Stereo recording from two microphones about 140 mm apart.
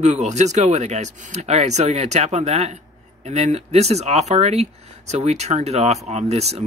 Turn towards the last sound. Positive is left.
turn(degrees=-50)  # may be behind; listen again after turning